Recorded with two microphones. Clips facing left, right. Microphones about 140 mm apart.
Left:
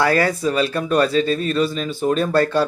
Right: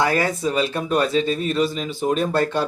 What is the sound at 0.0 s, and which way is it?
Speech, 20° right (ahead or behind).